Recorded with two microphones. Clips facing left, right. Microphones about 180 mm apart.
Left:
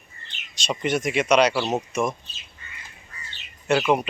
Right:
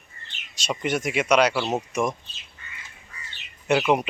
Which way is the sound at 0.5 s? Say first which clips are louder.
Left 1 dB; 5° right (ahead or behind).